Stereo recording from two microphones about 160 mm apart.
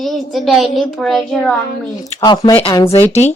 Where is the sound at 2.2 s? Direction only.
25° left (ahead or behind).